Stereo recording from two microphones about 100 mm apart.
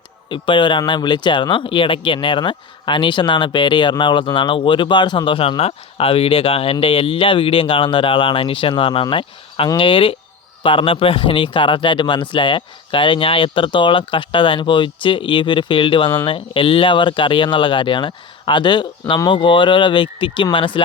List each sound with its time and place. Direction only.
0.3 s speech: 55° left (ahead or behind)